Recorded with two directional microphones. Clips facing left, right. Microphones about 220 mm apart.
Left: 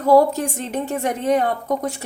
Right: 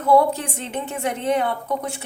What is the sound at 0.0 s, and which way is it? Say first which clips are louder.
A woman's voice: left 3 dB; 40° left (ahead or behind).